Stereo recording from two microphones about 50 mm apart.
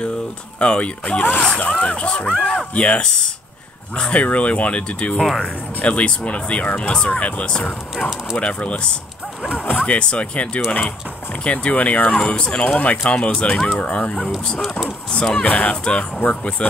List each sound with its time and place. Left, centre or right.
0.6 s speech: left
15.3 s speech: left